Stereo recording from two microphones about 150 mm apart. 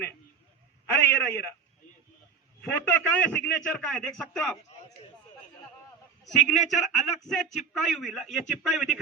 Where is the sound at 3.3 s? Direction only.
10° left (ahead or behind).